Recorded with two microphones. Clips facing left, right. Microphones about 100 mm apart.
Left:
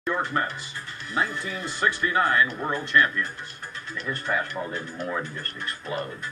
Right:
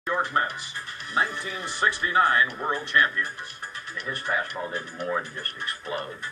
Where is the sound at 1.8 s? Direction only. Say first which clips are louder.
Right 1 dB; 30° right (ahead or behind).